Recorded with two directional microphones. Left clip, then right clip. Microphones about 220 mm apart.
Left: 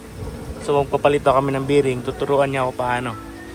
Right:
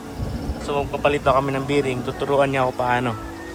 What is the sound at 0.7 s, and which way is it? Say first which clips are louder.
Speech: left 4 dB; 5° right (ahead or behind).